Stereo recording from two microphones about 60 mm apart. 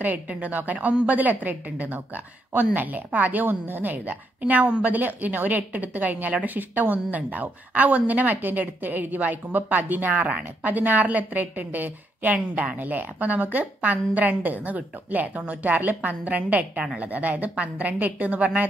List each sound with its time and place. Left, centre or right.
0.0 s a woman's voice: right